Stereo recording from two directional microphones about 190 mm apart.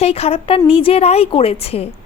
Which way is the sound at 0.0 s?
30° left (ahead or behind).